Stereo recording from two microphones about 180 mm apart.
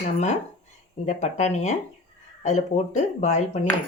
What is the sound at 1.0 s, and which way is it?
Speech, 40° left (ahead or behind).